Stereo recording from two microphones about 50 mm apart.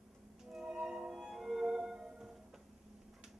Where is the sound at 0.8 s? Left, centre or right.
Centre.